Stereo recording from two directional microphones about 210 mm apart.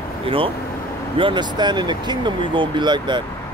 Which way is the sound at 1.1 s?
25° right (ahead or behind).